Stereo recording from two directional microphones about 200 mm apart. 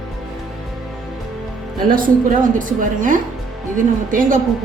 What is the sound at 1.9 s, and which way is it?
A woman's voice, 45° right (ahead or behind).